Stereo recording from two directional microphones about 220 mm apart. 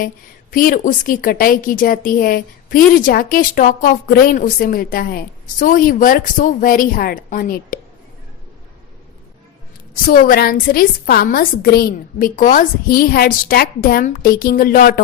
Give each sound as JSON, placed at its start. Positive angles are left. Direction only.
{"t": 0.5, "sound": "a woman's voice", "side_deg": 40}
{"t": 9.9, "sound": "a woman's voice", "side_deg": 40}